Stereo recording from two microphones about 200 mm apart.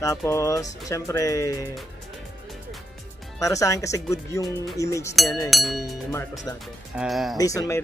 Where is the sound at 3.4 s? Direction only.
15° left (ahead or behind).